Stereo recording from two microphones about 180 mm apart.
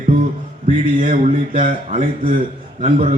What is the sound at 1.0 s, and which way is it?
A man's voice, 40° right (ahead or behind).